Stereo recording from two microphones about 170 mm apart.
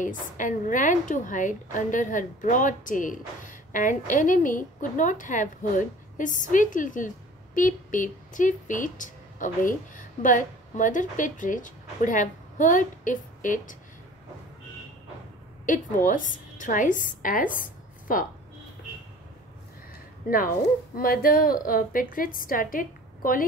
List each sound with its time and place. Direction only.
0.0 s a woman's voice: 50° left (ahead or behind)
16.1 s speech: 50° left (ahead or behind)
20.2 s a woman's voice: 55° left (ahead or behind)